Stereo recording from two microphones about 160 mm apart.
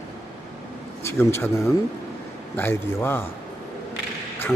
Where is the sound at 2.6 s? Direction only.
15° left (ahead or behind).